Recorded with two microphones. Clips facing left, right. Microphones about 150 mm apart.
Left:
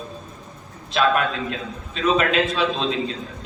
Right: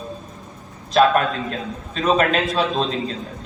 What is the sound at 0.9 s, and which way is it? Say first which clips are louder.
A man's voice: right 4 dB; 40° right (ahead or behind).